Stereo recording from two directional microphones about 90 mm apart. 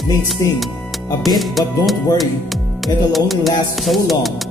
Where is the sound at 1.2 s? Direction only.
Centre (ahead or behind).